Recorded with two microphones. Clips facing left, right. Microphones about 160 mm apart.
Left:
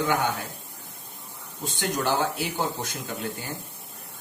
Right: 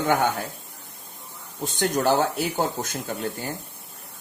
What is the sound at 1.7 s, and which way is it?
Speech, 45° right (ahead or behind).